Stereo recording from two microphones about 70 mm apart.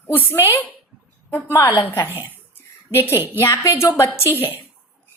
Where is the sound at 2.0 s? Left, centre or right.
Right.